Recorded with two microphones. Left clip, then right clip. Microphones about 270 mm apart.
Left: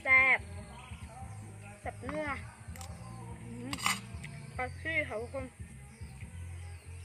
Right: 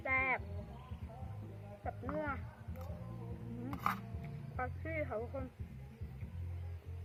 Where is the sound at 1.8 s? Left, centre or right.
Centre.